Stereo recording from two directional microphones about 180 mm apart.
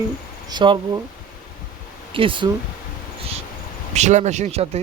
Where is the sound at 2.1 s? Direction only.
30° right (ahead or behind).